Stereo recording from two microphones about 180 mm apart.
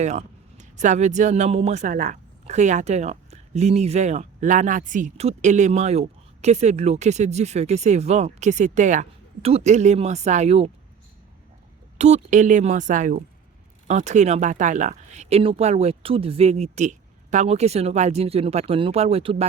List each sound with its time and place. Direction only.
0.0 s a man's voice: 40° right (ahead or behind)
11.9 s a woman's voice: 40° right (ahead or behind)